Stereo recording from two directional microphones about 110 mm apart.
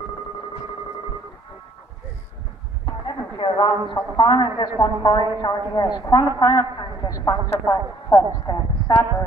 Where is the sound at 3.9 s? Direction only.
40° left (ahead or behind).